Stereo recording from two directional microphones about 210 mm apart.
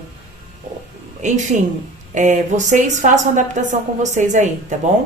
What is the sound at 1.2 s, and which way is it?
A woman's voice, 35° right (ahead or behind).